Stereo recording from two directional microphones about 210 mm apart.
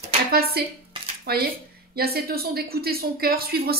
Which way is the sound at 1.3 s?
50° right (ahead or behind).